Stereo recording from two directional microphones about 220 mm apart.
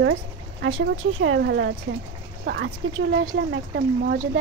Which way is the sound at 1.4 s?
50° right (ahead or behind).